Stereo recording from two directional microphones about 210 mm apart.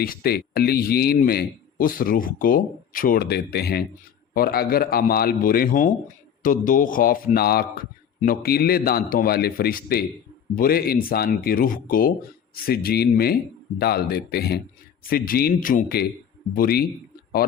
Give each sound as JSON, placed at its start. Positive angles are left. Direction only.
{"t": 0.0, "sound": "speech", "side_deg": 45}